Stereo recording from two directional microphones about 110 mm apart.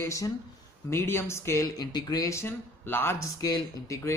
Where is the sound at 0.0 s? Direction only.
30° left (ahead or behind).